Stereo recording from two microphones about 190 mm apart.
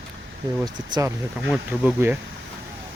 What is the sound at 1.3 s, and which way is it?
Speech, 5° right (ahead or behind).